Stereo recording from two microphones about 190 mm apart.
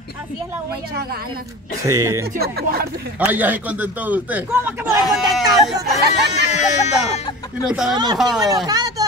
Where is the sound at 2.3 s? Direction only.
55° right (ahead or behind).